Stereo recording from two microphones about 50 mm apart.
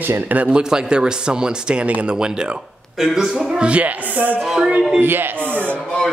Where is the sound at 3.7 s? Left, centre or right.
Right.